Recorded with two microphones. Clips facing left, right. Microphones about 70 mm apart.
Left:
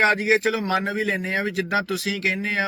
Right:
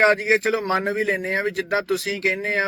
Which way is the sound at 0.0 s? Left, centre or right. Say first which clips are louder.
Right 1 dB; right.